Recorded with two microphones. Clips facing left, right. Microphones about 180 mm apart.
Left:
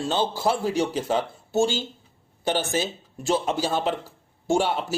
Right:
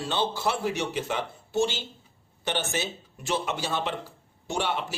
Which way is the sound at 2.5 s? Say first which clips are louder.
Left 5 dB; 35° left (ahead or behind).